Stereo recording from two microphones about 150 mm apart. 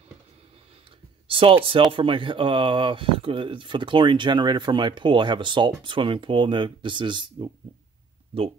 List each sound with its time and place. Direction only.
1.2 s speech: 35° right (ahead or behind)